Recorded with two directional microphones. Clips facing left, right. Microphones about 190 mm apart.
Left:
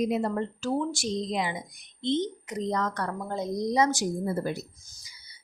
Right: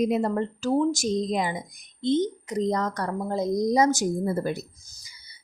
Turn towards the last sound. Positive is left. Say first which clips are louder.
# right 3 dB
turn(degrees=-50)  # may be behind; listen again after turning